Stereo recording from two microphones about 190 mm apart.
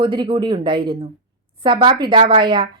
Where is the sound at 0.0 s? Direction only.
25° right (ahead or behind).